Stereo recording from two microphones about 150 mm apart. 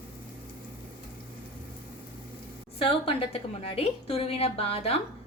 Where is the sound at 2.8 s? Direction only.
40° left (ahead or behind).